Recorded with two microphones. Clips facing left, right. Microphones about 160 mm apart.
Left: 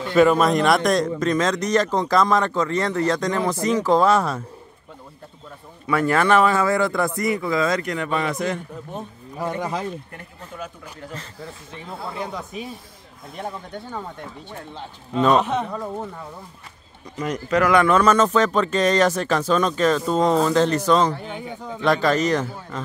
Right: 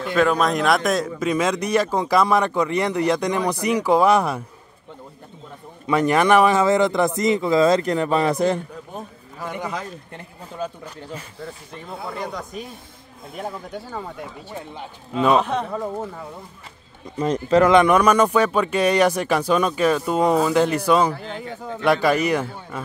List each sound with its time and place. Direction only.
0.1 s a man's voice: 5° left (ahead or behind); by 4.4 s 15° right (ahead or behind)
5.9 s a man's voice: 20° right (ahead or behind)
9.6 s speech: 30° left (ahead or behind)
11.4 s speech: centre (ahead or behind)
17.2 s a man's voice: 30° right (ahead or behind); by 21.2 s 10° right (ahead or behind)
21.2 s speech: centre (ahead or behind)
21.8 s a man's voice: 10° right (ahead or behind)